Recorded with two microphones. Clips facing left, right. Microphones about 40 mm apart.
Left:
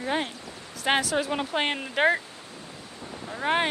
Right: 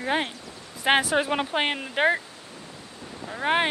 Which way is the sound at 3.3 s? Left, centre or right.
Centre.